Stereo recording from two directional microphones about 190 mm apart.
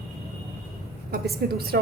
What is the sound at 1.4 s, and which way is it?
Speech, 55° right (ahead or behind).